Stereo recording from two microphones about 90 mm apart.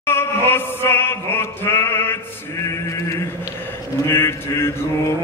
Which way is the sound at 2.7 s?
35° left (ahead or behind).